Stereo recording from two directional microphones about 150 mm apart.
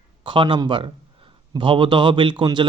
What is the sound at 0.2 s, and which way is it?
A man's voice, 35° right (ahead or behind).